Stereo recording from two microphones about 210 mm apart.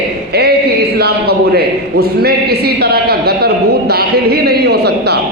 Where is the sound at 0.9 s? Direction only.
50° right (ahead or behind).